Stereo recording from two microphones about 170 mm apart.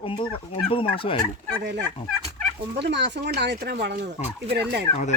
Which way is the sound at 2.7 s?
90° right.